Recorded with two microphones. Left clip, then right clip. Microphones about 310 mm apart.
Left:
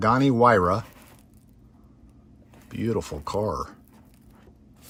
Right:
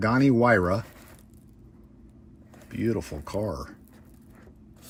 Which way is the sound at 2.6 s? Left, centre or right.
Centre.